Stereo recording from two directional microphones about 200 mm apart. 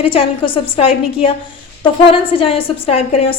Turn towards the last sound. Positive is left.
turn(degrees=30)  # may be behind; listen again after turning